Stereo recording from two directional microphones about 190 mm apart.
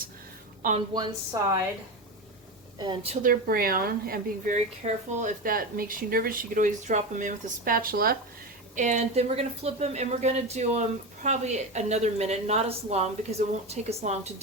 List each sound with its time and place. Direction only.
0.9 s a woman's voice: 20° right (ahead or behind)
2.7 s a woman's voice: 25° right (ahead or behind)
3.2 s speech: 50° right (ahead or behind)
4.5 s speech: 35° right (ahead or behind)
8.7 s a woman's voice: 40° right (ahead or behind)